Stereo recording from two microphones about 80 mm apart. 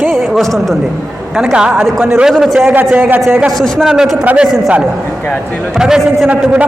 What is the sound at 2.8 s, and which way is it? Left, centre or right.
Speech, centre.